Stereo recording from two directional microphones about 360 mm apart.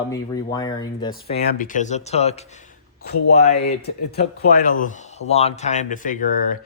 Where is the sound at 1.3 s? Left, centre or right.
Left.